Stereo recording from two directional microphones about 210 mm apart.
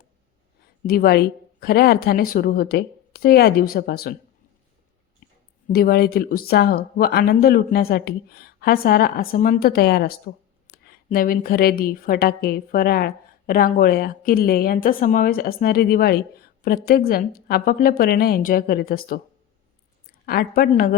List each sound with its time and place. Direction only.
0.9 s a woman's voice: 45° left (ahead or behind)
5.2 s a sound: 40° left (ahead or behind)
5.7 s a woman's voice: 45° left (ahead or behind)
20.2 s a woman's voice: 45° left (ahead or behind)